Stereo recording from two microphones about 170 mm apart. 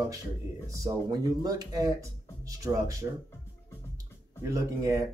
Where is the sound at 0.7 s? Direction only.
20° right (ahead or behind).